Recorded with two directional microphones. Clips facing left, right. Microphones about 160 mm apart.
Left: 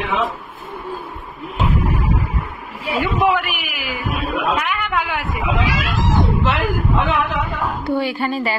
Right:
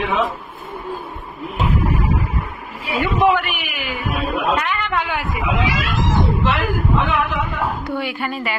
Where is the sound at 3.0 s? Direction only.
Centre (ahead or behind).